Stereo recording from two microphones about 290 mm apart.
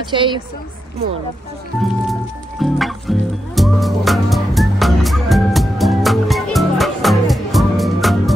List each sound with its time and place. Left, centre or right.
0.1 s a woman's voice: centre
2.6 s music: centre